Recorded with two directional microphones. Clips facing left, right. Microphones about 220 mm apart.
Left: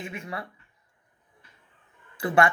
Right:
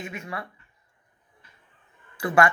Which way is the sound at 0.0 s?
30° left (ahead or behind).